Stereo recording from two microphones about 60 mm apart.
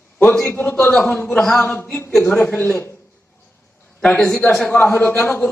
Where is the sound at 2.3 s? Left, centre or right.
Left.